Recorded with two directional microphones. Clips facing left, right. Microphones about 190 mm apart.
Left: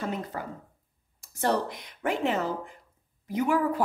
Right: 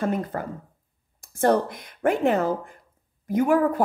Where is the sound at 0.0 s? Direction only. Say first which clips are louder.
Right 7 dB; 50° right (ahead or behind).